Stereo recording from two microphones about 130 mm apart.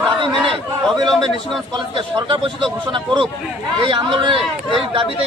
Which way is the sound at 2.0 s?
40° right (ahead or behind).